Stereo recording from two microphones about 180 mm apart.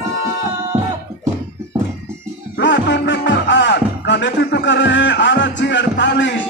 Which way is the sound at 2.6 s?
75° left (ahead or behind).